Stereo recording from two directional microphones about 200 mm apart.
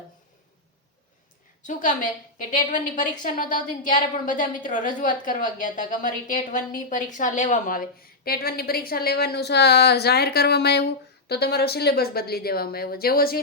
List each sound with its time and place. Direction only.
1.6 s a woman's voice: 40° left (ahead or behind)